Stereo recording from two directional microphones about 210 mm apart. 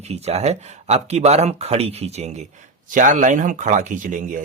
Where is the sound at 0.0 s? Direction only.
30° right (ahead or behind).